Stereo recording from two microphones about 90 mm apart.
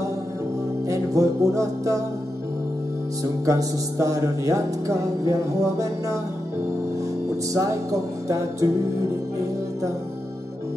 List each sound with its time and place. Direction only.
0.8 s music: 40° right (ahead or behind)
3.4 s music: 40° right (ahead or behind)
7.5 s music: 40° right (ahead or behind)